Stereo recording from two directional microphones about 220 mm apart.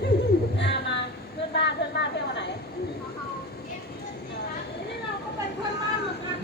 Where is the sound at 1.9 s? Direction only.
50° left (ahead or behind).